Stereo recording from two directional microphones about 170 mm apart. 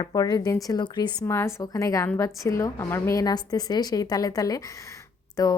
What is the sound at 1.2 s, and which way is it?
A woman's voice, 15° left (ahead or behind).